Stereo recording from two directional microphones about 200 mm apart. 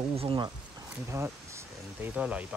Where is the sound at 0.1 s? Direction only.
30° right (ahead or behind).